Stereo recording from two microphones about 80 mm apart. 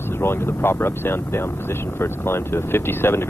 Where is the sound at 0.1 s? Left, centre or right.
Left.